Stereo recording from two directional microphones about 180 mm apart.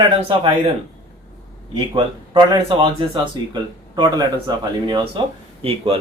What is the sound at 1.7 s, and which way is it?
Speech, 25° right (ahead or behind).